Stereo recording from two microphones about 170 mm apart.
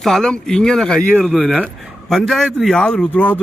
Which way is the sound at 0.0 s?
5° left (ahead or behind).